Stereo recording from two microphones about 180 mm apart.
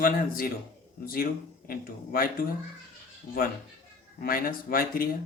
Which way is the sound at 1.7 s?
55° left (ahead or behind).